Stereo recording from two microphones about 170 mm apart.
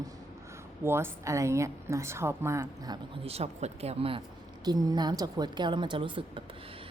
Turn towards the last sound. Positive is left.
turn(degrees=-30)  # may be behind; listen again after turning